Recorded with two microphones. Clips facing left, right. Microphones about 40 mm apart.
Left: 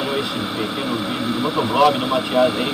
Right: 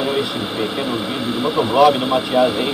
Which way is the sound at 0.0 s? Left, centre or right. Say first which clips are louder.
Right 2 dB; centre.